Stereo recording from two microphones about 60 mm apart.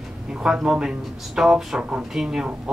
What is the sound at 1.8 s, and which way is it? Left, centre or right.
Speech, right.